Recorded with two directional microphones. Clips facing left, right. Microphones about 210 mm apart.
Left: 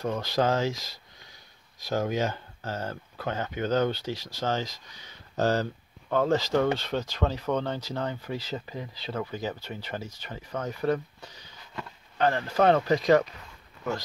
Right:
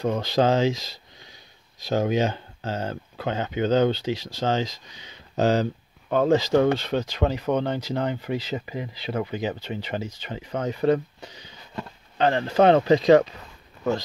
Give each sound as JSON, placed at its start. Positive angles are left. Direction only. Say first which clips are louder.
{"t": 0.0, "sound": "speech", "louder": "right 5 dB", "side_deg": -25}